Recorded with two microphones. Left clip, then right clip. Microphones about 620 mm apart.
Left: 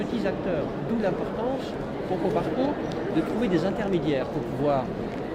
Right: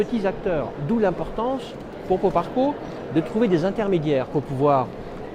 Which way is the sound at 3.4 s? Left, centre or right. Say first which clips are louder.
Right 4 dB; right.